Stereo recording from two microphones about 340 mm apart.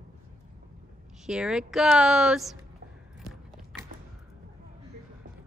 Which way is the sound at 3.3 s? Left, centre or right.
Centre.